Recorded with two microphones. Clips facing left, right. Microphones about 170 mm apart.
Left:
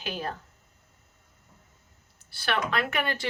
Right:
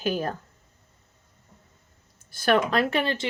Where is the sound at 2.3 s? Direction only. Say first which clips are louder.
Right 7 dB; 45° right (ahead or behind); by 3.3 s 25° right (ahead or behind).